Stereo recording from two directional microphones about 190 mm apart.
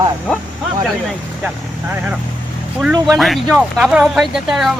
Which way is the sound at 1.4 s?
5° right (ahead or behind).